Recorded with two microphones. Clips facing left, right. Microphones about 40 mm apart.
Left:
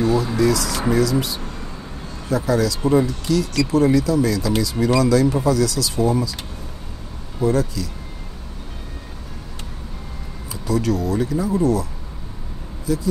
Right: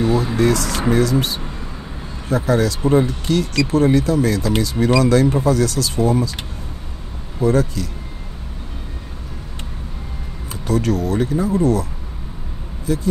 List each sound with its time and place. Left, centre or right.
0.4 s speech: right
2.2 s speech: right
7.4 s speech: right
10.5 s speech: right